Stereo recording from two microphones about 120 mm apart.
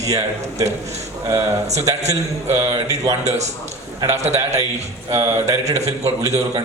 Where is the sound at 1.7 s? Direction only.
30° right (ahead or behind).